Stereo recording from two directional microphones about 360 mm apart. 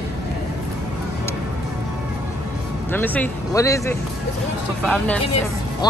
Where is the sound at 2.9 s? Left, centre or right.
Centre.